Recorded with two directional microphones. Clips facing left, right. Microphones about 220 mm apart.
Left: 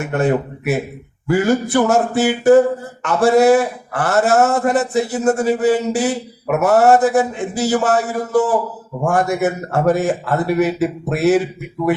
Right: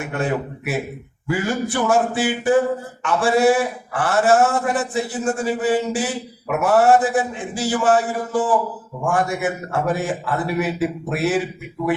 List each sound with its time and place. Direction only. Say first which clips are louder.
0.0 s a man's voice: left 6 dB; 40° left (ahead or behind)